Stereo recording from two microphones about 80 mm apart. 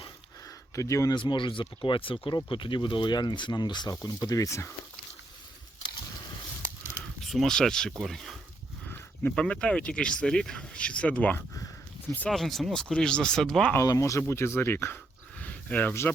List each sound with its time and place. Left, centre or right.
0.8 s speech: left
1.1 s speech: left
4.0 s speech: left
7.3 s speech: centre; by 11.4 s left
12.3 s speech: centre
13.8 s speech: left
15.4 s a sound: centre